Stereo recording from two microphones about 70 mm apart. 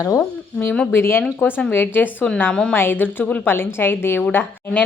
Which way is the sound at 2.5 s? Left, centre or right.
Centre.